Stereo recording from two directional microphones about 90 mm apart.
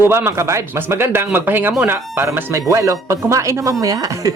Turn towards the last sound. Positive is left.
turn(degrees=-40)  # may be behind; listen again after turning